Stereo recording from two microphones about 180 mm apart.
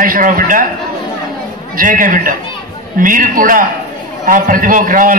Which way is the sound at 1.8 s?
50° right (ahead or behind).